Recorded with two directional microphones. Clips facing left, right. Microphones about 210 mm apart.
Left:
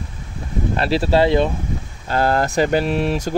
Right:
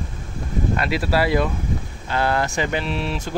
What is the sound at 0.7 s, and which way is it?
Speech, 30° left (ahead or behind).